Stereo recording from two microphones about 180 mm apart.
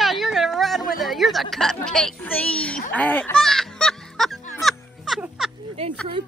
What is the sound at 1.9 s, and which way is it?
Speech, 5° left (ahead or behind).